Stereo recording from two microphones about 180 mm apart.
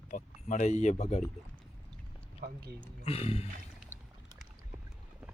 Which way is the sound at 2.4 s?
60° right (ahead or behind).